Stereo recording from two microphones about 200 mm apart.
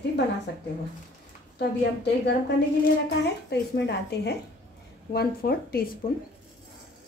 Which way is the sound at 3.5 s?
55° left (ahead or behind).